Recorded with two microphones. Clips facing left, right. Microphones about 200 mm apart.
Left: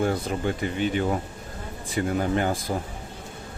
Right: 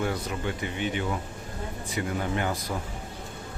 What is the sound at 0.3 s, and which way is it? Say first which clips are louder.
Speech: left 5 dB; 40° left (ahead or behind).